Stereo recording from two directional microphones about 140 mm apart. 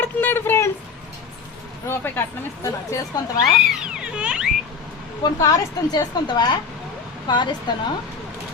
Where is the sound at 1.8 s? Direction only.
15° left (ahead or behind).